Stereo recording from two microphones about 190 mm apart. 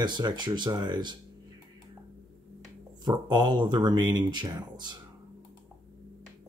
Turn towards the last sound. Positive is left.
turn(degrees=-20)  # may be behind; listen again after turning